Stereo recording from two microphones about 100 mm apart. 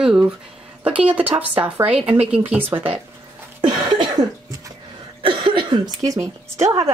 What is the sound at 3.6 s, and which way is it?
Cough, 45° right (ahead or behind).